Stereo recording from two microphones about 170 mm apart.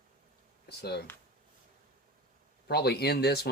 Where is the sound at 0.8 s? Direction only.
75° left (ahead or behind).